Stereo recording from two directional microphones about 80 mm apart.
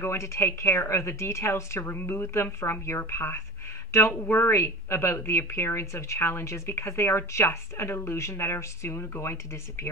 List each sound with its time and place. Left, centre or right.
0.0 s speech: left